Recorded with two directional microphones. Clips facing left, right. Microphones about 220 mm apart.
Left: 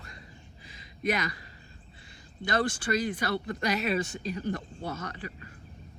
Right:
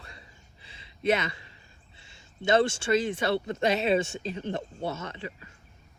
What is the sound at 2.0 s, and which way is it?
Speech, 25° right (ahead or behind).